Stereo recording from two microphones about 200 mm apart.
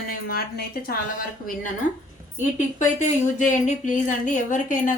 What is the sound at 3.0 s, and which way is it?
Speech, 35° left (ahead or behind).